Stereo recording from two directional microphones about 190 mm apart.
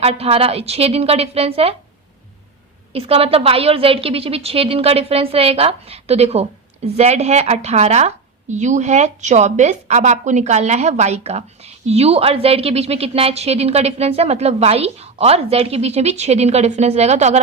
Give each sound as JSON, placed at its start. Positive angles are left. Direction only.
{"t": 0.0, "sound": "a woman's voice", "side_deg": -30}
{"t": 2.9, "sound": "a woman's voice", "side_deg": -30}